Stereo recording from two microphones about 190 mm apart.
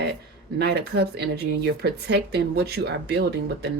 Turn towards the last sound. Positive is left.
turn(degrees=-60)  # may be behind; listen again after turning